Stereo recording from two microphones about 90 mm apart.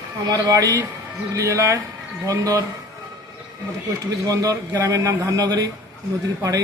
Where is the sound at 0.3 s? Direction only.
40° right (ahead or behind).